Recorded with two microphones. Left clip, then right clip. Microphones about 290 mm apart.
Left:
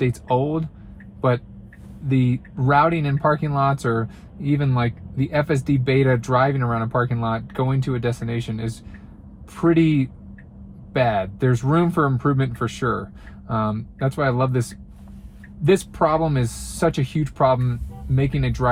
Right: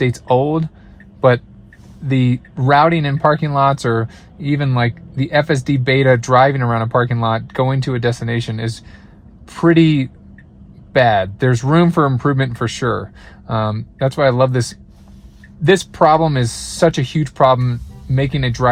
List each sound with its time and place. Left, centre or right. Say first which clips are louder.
0.0 s speech: right 6 dB; right
2.0 s speech: right 4 dB; right